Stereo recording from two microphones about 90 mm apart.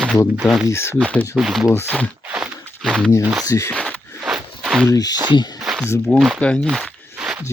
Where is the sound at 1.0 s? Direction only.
15° left (ahead or behind).